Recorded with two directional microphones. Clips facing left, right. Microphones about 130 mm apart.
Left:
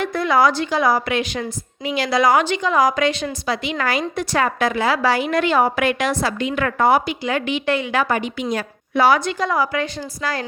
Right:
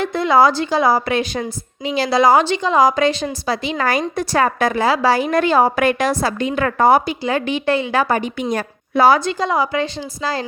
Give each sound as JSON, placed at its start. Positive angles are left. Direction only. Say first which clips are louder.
{"t": 0.0, "sound": "a woman's voice", "louder": "right 3 dB", "side_deg": -25}